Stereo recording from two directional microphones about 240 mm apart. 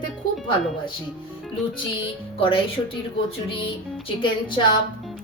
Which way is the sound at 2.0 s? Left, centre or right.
Left.